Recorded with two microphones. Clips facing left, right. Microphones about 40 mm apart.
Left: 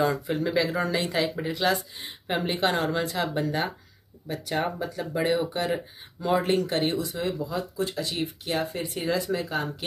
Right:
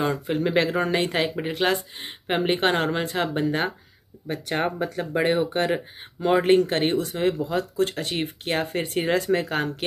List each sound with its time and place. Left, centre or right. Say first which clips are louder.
0.3 s speech: right 3 dB; right